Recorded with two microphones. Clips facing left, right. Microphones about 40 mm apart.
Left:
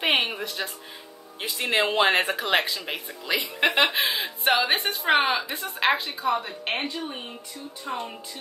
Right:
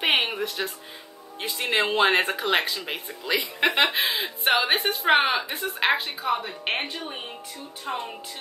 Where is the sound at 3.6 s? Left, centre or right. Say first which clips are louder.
Even; centre.